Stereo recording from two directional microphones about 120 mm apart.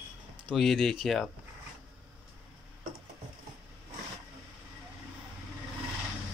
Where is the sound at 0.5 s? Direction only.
Centre (ahead or behind).